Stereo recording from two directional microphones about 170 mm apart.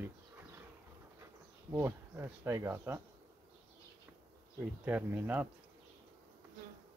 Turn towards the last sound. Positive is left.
turn(degrees=-10)  # may be behind; listen again after turning